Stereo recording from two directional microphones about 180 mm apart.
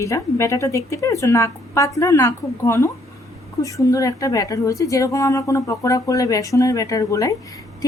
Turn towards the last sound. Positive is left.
turn(degrees=20)  # may be behind; listen again after turning